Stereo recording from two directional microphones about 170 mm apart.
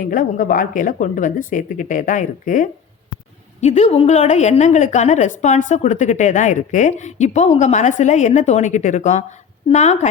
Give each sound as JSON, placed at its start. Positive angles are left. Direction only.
{"t": 0.0, "sound": "a woman's voice", "side_deg": 50}